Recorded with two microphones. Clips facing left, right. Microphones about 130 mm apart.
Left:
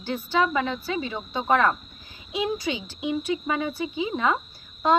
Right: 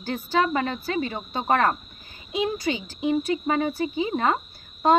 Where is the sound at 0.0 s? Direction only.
45° right (ahead or behind).